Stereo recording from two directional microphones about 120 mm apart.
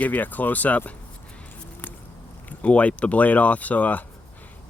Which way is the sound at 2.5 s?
10° left (ahead or behind).